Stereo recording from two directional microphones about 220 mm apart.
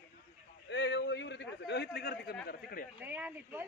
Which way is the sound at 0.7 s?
55° left (ahead or behind).